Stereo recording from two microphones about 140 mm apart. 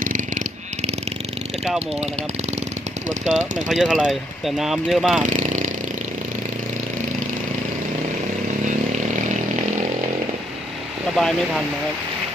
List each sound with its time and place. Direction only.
0.0 s a sound: 70° right (ahead or behind)
3.3 s speech: 60° right (ahead or behind)
3.7 s speech: 5° right (ahead or behind)
5.2 s vehicle: 60° right (ahead or behind)
11.1 s speech: centre (ahead or behind)